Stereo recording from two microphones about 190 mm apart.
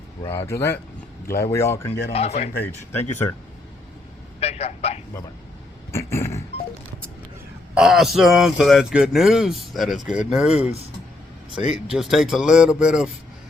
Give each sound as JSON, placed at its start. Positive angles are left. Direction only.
{"t": 0.3, "sound": "speech", "side_deg": 15}
{"t": 2.1, "sound": "speech", "side_deg": 35}
{"t": 2.9, "sound": "speech", "side_deg": 10}
{"t": 4.4, "sound": "vehicle", "side_deg": 35}
{"t": 5.9, "sound": "a sound", "side_deg": 15}
{"t": 7.8, "sound": "speech", "side_deg": 0}
{"t": 10.5, "sound": "speech", "side_deg": 35}
{"t": 11.7, "sound": "speech", "side_deg": -5}